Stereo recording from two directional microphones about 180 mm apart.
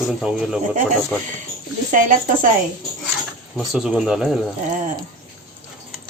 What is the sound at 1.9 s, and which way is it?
Speech, 50° right (ahead or behind).